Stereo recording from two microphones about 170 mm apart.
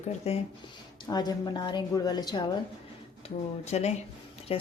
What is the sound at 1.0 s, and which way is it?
A woman's voice, 25° left (ahead or behind).